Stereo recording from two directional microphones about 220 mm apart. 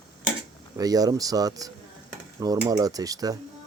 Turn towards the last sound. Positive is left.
turn(degrees=-15)  # may be behind; listen again after turning